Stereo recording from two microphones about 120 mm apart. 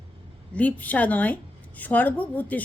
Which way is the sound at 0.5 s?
15° left (ahead or behind).